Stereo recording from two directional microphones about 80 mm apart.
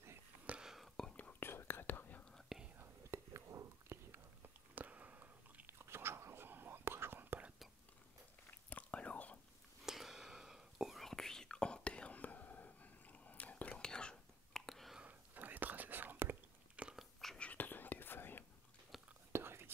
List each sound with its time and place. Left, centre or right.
0.5 s whispering: centre
0.9 s whispering: centre
1.4 s whispering: left
2.8 s whispering: right
4.1 s chewing: right
5.7 s whispering: right
8.5 s chewing: centre
9.8 s whispering: centre
15.0 s whispering: centre
16.7 s biting: centre
17.4 s whispering: left
18.9 s whispering: centre
19.3 s whispering: right